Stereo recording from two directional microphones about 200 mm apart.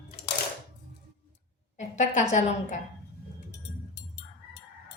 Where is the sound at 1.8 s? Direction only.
35° left (ahead or behind).